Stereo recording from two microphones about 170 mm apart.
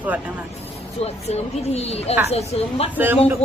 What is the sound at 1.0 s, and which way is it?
Speech, 40° left (ahead or behind).